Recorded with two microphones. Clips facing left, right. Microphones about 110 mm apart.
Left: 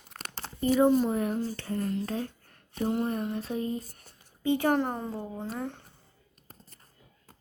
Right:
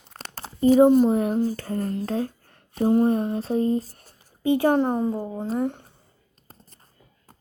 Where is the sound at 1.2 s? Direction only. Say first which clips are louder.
Right 7 dB; 45° right (ahead or behind).